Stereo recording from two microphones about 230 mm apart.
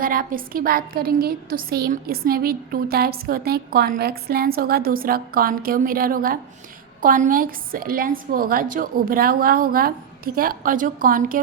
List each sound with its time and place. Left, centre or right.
0.0 s a woman's voice: right